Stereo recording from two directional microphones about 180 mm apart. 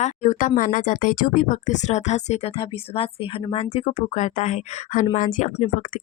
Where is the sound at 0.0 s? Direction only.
45° left (ahead or behind).